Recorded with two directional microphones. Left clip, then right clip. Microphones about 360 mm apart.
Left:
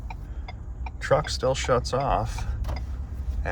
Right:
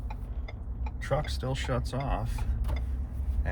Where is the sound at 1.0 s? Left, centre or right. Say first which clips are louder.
Left 9 dB; centre.